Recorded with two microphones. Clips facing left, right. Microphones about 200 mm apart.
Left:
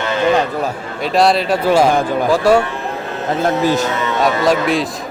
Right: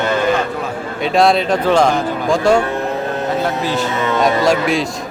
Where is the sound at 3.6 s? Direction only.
45° left (ahead or behind).